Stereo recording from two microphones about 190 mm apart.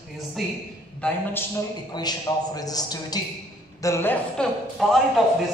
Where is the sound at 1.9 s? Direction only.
20° left (ahead or behind).